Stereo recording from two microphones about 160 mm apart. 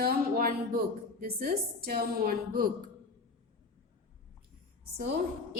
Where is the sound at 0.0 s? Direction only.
70° right (ahead or behind).